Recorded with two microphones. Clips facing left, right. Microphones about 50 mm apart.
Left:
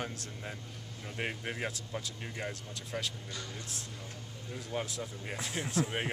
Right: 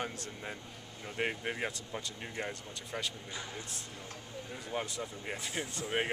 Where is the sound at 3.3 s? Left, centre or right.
Centre.